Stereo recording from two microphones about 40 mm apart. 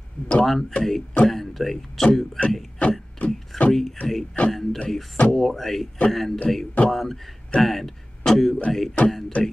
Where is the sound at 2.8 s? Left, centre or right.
Left.